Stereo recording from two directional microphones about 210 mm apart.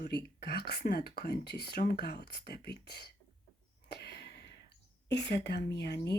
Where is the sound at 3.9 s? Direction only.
55° left (ahead or behind).